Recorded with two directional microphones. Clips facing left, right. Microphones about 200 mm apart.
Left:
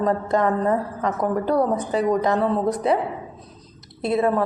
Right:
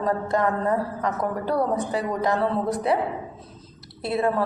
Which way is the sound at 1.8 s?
20° left (ahead or behind).